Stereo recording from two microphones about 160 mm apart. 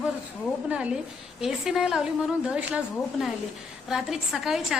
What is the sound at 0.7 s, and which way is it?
A woman's voice, 5° right (ahead or behind).